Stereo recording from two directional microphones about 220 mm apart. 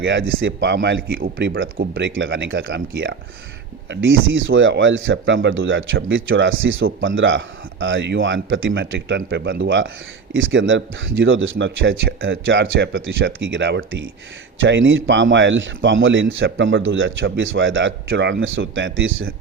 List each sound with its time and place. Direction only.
0.0 s speech: 60° right (ahead or behind)
1.7 s speech: 40° right (ahead or behind); by 19.1 s 60° right (ahead or behind)